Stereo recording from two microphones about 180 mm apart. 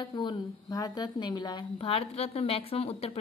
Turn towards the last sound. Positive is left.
turn(degrees=35)  # may be behind; listen again after turning